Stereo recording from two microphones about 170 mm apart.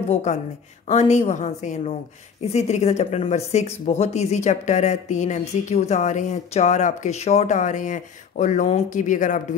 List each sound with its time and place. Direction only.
0.1 s a woman's voice: 40° left (ahead or behind)